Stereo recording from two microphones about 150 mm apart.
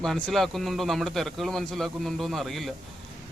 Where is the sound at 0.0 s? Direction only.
Centre (ahead or behind).